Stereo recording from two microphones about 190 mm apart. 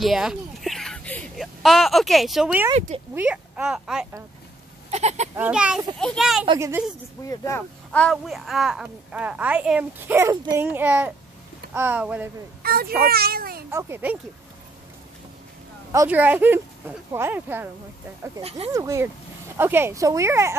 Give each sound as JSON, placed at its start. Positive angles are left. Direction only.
{"t": 0.0, "sound": "speech", "side_deg": 0}
{"t": 4.9, "sound": "speech", "side_deg": -35}
{"t": 5.3, "sound": "speech", "side_deg": -5}
{"t": 7.2, "sound": "speech", "side_deg": 15}
{"t": 10.6, "sound": "speech", "side_deg": -10}
{"t": 12.6, "sound": "a child's voice", "side_deg": -50}
{"t": 13.7, "sound": "speech", "side_deg": -15}
{"t": 15.9, "sound": "speech", "side_deg": -10}
{"t": 18.7, "sound": "speech", "side_deg": -15}